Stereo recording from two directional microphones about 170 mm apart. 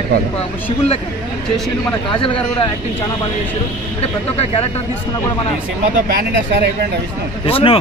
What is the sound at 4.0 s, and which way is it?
Speech, 35° left (ahead or behind).